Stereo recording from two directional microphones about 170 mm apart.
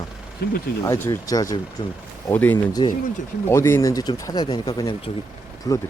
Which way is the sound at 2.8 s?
30° left (ahead or behind).